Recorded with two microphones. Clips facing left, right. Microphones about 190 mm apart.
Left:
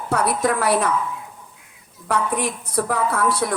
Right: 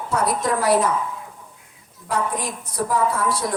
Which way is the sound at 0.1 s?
60° left (ahead or behind).